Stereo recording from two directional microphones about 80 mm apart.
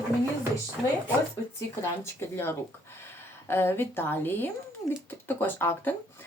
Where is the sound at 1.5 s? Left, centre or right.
Left.